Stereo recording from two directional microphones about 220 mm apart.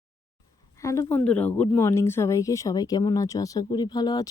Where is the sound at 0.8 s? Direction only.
15° left (ahead or behind).